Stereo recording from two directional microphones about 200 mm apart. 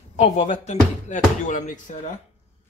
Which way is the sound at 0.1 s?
35° left (ahead or behind).